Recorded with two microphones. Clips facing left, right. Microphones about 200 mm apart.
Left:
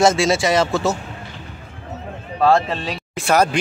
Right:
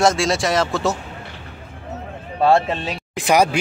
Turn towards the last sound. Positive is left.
turn(degrees=-15)  # may be behind; listen again after turning